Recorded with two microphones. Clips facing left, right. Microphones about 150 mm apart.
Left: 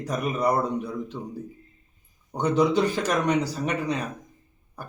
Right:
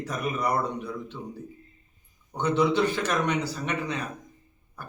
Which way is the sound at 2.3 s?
35° left (ahead or behind).